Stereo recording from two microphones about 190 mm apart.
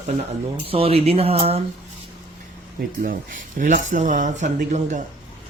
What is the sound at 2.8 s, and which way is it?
Speech, 45° right (ahead or behind).